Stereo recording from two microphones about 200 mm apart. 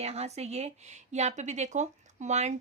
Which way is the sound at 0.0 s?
30° right (ahead or behind).